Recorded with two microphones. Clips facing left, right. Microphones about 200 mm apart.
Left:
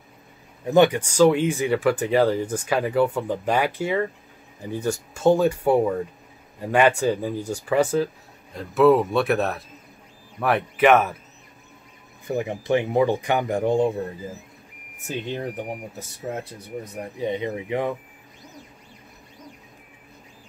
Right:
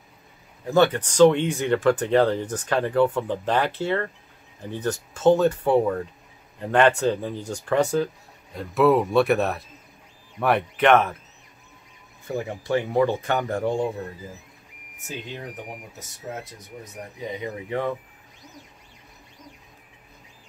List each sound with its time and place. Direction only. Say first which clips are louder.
0.7 s speech: left 2 dB; 15° left (ahead or behind)
12.3 s speech: left 3 dB; 20° left (ahead or behind)
17.2 s speech: left 6 dB; 25° left (ahead or behind)
17.6 s speech: even; 15° left (ahead or behind)